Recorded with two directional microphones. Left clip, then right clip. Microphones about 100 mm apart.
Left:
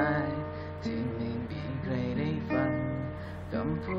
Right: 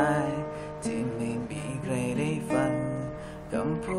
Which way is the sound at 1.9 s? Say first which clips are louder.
Right 4 dB; 10° right (ahead or behind).